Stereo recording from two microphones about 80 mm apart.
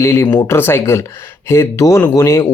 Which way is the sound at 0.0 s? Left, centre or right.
Left.